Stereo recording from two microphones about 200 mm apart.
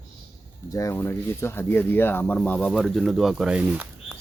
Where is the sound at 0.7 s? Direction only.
15° left (ahead or behind); by 4.2 s 10° right (ahead or behind).